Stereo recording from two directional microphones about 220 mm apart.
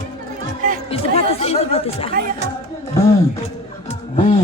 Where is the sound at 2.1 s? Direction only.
40° right (ahead or behind).